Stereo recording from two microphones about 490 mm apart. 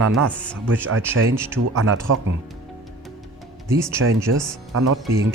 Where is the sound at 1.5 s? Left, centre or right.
Right.